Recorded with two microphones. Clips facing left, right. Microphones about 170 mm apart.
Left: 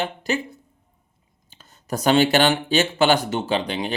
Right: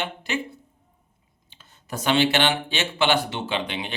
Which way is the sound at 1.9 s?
40° left (ahead or behind).